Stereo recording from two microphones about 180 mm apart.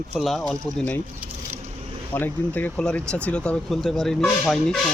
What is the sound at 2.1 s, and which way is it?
Speech, 10° left (ahead or behind).